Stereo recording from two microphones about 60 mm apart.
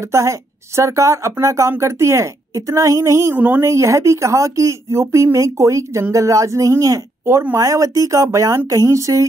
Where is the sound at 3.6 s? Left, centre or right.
Right.